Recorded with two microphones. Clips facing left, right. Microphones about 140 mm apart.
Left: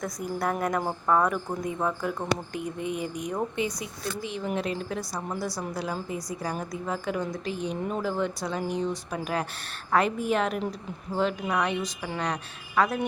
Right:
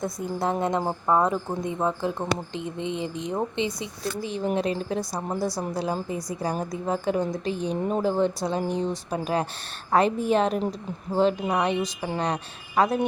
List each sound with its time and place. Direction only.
0.0 s a woman's voice: 25° right (ahead or behind)